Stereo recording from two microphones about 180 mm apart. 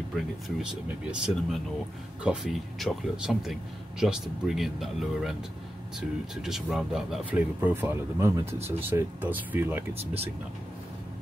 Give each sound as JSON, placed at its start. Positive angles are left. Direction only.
{"t": 0.1, "sound": "speech", "side_deg": -5}
{"t": 9.9, "sound": "speech", "side_deg": -35}